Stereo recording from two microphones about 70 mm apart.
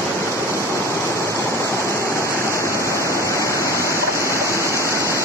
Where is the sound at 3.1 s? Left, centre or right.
Left.